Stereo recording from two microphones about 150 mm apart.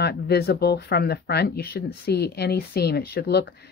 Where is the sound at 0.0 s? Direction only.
90° left.